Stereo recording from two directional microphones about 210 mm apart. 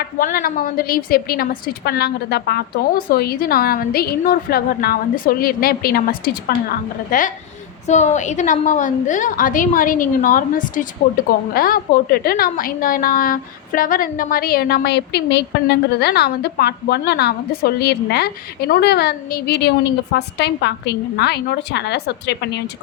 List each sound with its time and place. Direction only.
0.0 s a woman's voice: 40° left (ahead or behind)